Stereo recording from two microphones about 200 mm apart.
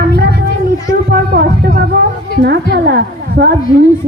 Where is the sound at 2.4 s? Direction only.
55° right (ahead or behind).